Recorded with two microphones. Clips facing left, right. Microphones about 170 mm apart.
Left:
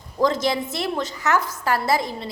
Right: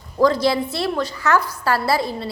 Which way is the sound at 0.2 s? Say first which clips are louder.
Right 4 dB; 20° left (ahead or behind).